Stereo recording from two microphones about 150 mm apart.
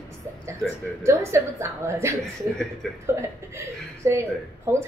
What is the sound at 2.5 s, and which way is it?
Speech, 5° left (ahead or behind).